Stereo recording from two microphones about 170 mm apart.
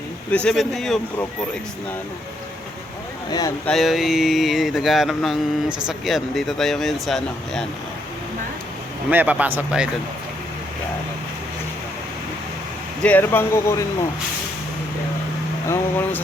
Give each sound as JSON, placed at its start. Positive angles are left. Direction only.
{"t": 0.3, "sound": "speech", "side_deg": 5}
{"t": 3.2, "sound": "speech", "side_deg": 20}
{"t": 3.7, "sound": "speech", "side_deg": 0}
{"t": 9.0, "sound": "speech", "side_deg": -10}
{"t": 13.0, "sound": "speech", "side_deg": 10}
{"t": 15.7, "sound": "speech", "side_deg": 15}